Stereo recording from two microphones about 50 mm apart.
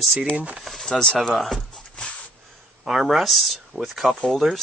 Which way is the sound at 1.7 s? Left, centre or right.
Centre.